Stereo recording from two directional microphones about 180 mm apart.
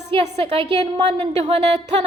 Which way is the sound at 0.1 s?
30° right (ahead or behind).